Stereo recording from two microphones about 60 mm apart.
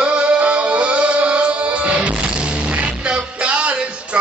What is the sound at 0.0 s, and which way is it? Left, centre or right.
Music, centre.